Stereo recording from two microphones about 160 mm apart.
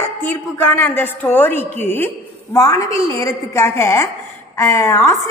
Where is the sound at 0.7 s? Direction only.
15° left (ahead or behind).